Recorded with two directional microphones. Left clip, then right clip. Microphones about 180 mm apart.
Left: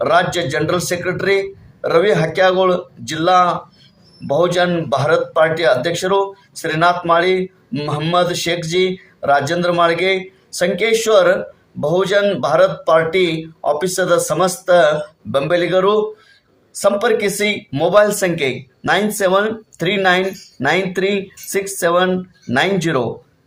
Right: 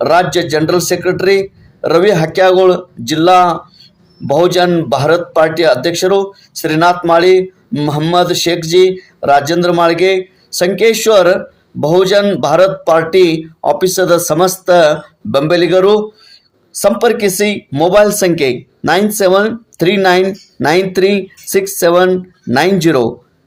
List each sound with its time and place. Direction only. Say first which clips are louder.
0.0 s speech: right 4 dB; 35° right (ahead or behind)